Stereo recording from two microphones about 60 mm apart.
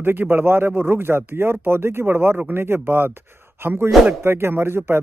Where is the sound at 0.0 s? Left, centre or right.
Right.